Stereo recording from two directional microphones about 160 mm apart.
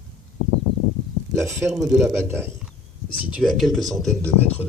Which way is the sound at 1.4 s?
15° right (ahead or behind).